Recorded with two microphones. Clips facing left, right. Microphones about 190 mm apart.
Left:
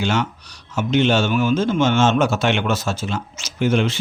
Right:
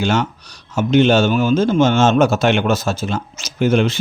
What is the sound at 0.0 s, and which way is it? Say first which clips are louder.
Speech: right 3 dB; 40° right (ahead or behind).